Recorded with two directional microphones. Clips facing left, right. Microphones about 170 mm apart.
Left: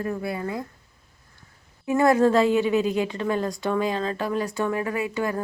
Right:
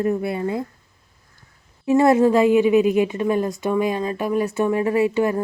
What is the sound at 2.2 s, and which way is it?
A woman's voice, 15° right (ahead or behind).